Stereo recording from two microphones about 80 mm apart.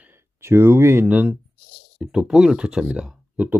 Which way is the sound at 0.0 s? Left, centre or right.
Right.